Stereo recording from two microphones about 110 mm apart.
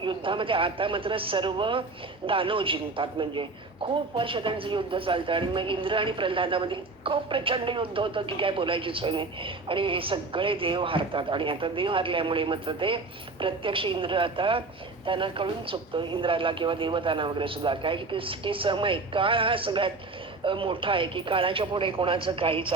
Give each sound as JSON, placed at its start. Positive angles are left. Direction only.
{"t": 0.0, "sound": "speech", "side_deg": -50}